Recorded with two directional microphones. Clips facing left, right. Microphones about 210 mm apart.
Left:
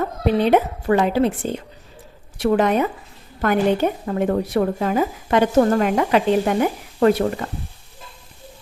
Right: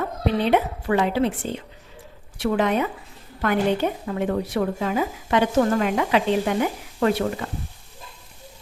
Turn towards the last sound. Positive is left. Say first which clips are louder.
# left 5 dB
turn(degrees=45)  # may be behind; listen again after turning